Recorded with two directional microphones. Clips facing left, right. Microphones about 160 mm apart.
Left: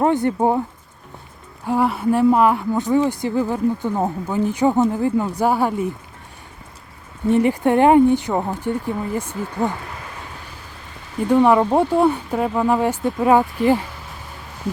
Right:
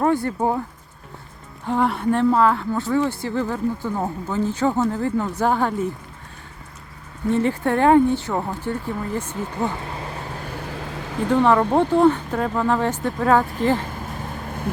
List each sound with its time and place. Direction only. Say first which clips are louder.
0.0 s speech: left 3 dB; 20° left (ahead or behind)
1.6 s speech: left 2 dB; 5° left (ahead or behind)
7.3 s speech: left 4 dB; 15° left (ahead or behind)
11.3 s speech: left 3 dB; 10° left (ahead or behind)